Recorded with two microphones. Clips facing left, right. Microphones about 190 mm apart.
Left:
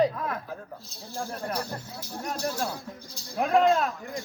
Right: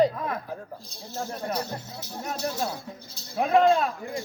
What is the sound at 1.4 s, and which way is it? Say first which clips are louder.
Speech: right 2 dB; 10° right (ahead or behind).